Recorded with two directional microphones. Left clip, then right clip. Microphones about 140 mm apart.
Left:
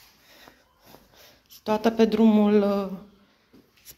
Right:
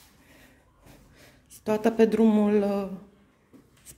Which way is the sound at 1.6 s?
35° right (ahead or behind).